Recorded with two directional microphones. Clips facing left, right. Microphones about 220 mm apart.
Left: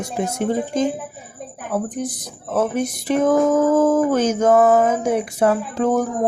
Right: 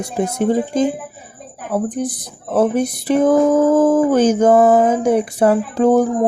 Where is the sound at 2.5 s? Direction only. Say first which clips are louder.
Right 5 dB; 35° right (ahead or behind).